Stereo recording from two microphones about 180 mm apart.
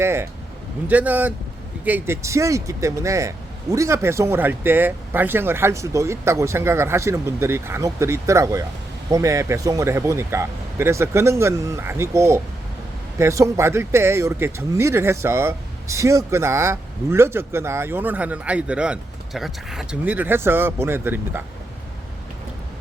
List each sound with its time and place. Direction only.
0.0 s speech: 15° right (ahead or behind)